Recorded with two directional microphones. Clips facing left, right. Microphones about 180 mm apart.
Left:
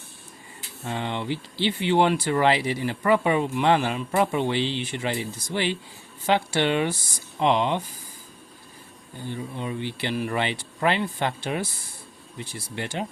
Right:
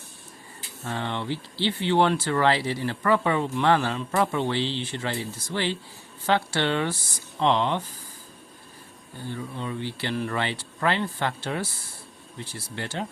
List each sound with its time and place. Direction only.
0.9 s speech: 15° left (ahead or behind)
9.2 s speech: 15° left (ahead or behind)